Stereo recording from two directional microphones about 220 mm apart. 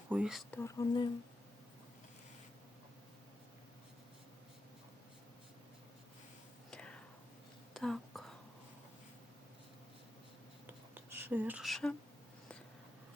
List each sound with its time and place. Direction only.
0.1 s speech: 5° right (ahead or behind)
0.6 s speech: 15° left (ahead or behind)
6.7 s whispering: 5° left (ahead or behind)
10.9 s speech: 10° right (ahead or behind)